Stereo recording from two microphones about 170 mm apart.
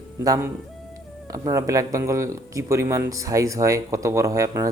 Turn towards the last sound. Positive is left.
turn(degrees=-20)  # may be behind; listen again after turning